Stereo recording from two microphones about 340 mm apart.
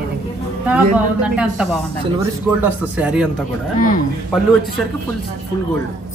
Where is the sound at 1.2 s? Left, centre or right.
Centre.